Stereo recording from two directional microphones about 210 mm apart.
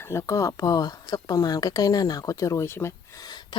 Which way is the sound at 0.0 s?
15° left (ahead or behind).